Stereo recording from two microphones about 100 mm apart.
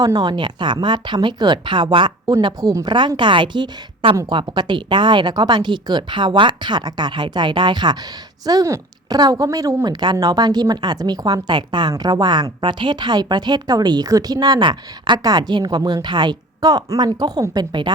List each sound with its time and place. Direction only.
0.0 s speech: 40° right (ahead or behind)
2.4 s speech: 40° right (ahead or behind)
8.4 s a woman's voice: 35° right (ahead or behind)